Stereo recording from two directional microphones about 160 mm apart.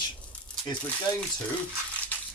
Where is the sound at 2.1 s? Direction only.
10° left (ahead or behind).